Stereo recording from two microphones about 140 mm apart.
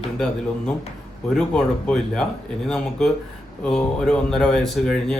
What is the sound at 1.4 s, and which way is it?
A man's voice, 5° left (ahead or behind).